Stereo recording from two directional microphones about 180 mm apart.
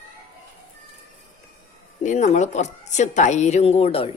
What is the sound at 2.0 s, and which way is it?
Speech, 40° left (ahead or behind).